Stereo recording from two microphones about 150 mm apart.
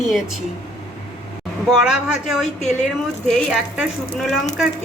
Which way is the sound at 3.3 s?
5° right (ahead or behind).